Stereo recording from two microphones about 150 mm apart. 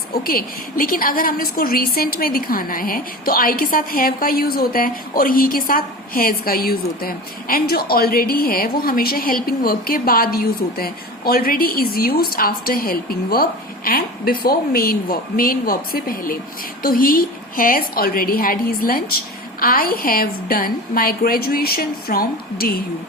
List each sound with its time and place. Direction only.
0.3 s a woman's voice: 75° left (ahead or behind); by 22.8 s 90° left